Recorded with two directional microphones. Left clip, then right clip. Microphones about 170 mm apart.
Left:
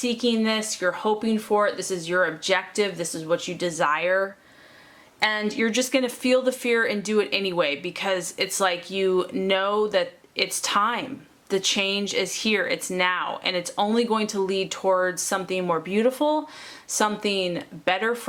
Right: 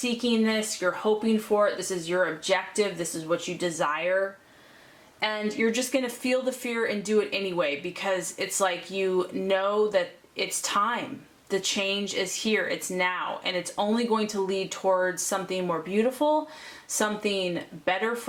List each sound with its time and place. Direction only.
0.0 s speech: 25° left (ahead or behind)
5.5 s speech: 25° left (ahead or behind)